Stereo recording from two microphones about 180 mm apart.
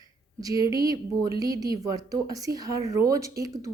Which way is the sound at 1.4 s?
20° right (ahead or behind).